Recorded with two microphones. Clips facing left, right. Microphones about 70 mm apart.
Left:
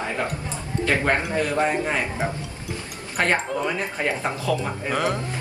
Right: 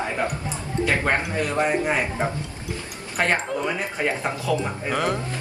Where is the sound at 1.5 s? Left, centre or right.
Right.